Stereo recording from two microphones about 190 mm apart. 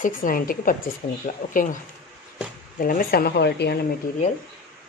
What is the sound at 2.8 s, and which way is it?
Speech, 50° left (ahead or behind).